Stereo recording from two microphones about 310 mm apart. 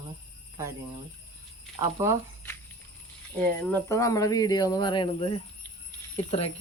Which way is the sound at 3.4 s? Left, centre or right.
Centre.